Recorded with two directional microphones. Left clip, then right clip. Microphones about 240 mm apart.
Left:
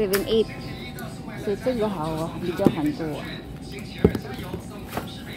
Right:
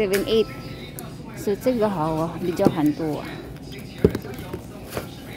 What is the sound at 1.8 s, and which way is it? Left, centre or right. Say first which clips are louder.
Speech: right 4 dB; right.